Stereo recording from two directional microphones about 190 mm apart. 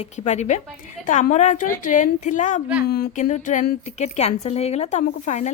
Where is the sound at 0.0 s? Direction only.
35° left (ahead or behind).